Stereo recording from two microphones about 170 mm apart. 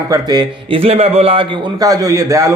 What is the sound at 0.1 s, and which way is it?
A man's voice, 25° right (ahead or behind).